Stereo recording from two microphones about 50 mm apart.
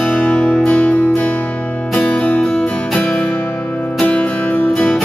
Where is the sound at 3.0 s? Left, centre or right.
Left.